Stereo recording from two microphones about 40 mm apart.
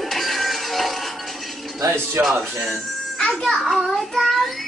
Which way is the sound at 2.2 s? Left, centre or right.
Right.